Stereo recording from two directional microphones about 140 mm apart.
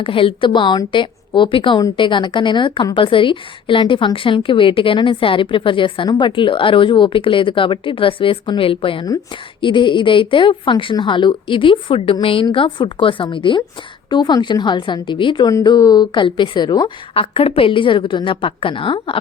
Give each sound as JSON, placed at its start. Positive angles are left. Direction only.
{"t": 0.0, "sound": "a woman's voice", "side_deg": 40}